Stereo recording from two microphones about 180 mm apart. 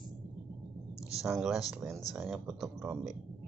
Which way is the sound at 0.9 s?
15° left (ahead or behind).